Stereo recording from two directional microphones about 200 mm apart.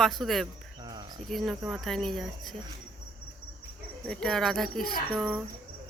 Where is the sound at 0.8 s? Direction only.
20° right (ahead or behind).